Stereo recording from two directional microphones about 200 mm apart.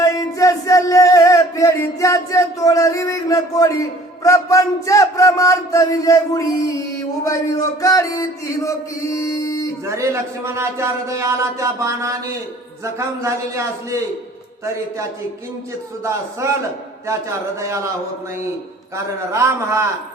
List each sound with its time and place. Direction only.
0.0 s music: 15° left (ahead or behind)
9.8 s a man's voice: 15° right (ahead or behind)
16.0 s a man's voice: 15° right (ahead or behind)
19.3 s a man's voice: 15° right (ahead or behind)